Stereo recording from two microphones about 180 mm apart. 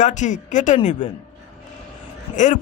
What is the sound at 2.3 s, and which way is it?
Speech, 45° left (ahead or behind).